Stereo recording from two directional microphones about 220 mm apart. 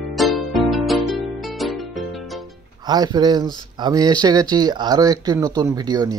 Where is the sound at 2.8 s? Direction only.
20° right (ahead or behind).